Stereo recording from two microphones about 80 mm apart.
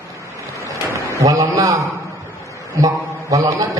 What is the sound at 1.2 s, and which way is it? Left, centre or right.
Speech, right.